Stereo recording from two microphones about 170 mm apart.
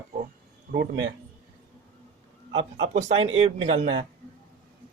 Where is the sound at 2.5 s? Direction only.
90° right.